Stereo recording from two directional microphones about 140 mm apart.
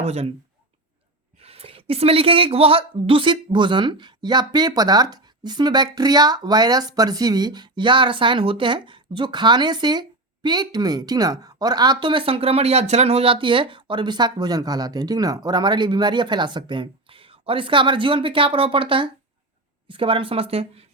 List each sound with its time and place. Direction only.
0.0 s speech: 50° right (ahead or behind)
1.4 s a woman's voice: 45° right (ahead or behind)